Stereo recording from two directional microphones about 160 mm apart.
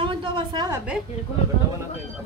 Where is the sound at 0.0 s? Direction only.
30° right (ahead or behind).